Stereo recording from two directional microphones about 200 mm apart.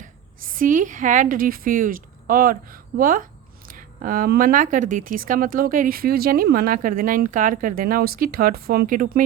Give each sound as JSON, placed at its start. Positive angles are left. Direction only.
{"t": 0.5, "sound": "speech", "side_deg": -40}